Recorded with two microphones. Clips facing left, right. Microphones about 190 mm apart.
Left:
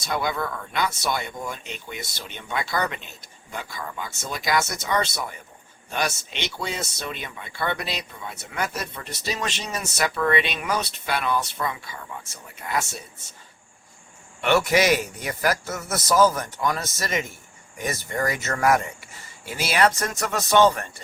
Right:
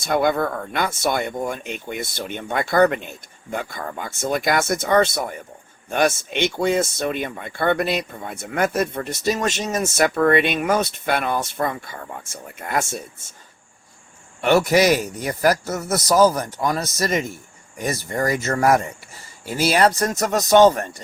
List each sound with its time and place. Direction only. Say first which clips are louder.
0.0 s speech: right 7 dB; 55° right (ahead or behind)
14.4 s a man's voice: right 4 dB; 40° right (ahead or behind)